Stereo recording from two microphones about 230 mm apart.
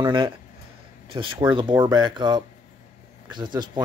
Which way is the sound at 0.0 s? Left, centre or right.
Centre.